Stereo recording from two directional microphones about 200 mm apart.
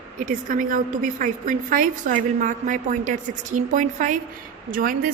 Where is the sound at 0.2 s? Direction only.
40° right (ahead or behind).